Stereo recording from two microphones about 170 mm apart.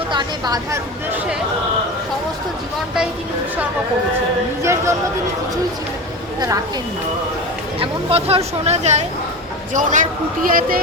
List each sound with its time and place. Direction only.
0.1 s a woman's voice: 25° right (ahead or behind)
4.6 s speech: 15° right (ahead or behind)
7.8 s speech: 35° right (ahead or behind); by 10.8 s 55° right (ahead or behind)